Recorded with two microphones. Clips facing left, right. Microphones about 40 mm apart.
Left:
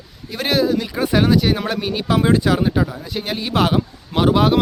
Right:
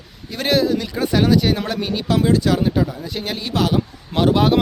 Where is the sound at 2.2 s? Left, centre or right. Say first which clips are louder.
Left 1 dB; left.